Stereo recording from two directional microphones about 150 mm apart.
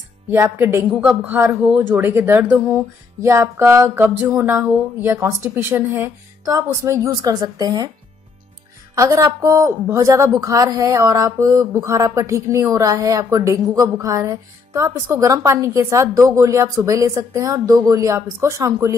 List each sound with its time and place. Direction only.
0.3 s speech: 15° right (ahead or behind)
8.9 s speech: 20° right (ahead or behind)